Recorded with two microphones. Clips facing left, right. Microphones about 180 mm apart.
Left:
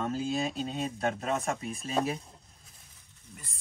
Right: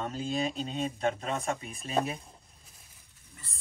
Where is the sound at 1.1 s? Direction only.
45° left (ahead or behind).